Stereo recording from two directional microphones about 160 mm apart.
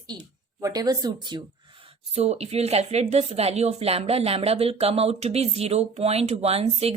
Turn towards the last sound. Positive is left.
turn(degrees=-40)  # may be behind; listen again after turning